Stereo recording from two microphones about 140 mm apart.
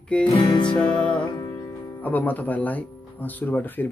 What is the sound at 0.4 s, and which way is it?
Music, 35° left (ahead or behind).